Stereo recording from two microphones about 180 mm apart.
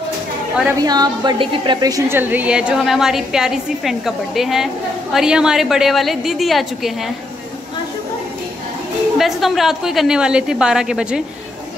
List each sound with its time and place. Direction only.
0.7 s a woman's voice: 20° right (ahead or behind); by 7.1 s centre (ahead or behind)
9.2 s a woman's voice: centre (ahead or behind)